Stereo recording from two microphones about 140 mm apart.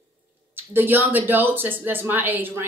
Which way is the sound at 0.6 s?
15° right (ahead or behind).